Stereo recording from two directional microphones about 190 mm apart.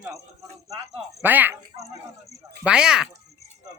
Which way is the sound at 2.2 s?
Centre (ahead or behind).